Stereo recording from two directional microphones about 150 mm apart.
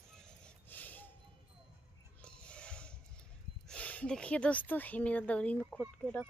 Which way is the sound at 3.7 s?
10° left (ahead or behind).